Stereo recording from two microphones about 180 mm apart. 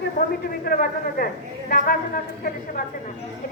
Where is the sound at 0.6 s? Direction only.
55° left (ahead or behind).